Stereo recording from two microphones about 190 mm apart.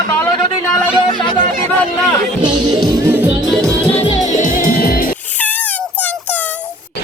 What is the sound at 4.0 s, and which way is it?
Music, 35° left (ahead or behind).